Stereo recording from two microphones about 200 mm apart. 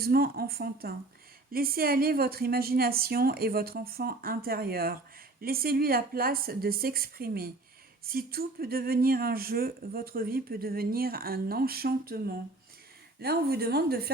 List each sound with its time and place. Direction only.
0.0 s speech: 50° right (ahead or behind)